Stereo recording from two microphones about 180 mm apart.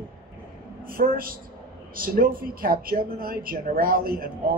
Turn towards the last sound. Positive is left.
turn(degrees=-55)  # may be behind; listen again after turning